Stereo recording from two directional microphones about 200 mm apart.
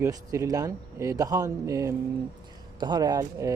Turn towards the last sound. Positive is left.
turn(degrees=-15)  # may be behind; listen again after turning